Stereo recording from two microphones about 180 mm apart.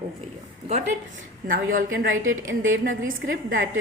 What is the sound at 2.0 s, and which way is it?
Speech, 90° right.